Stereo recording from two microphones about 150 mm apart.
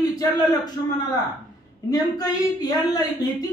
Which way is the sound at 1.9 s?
25° left (ahead or behind).